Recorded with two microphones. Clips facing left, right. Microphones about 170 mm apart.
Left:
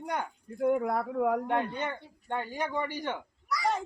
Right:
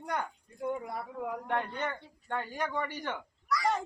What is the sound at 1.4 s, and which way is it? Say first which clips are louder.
Speech: left 3 dB; 15° left (ahead or behind).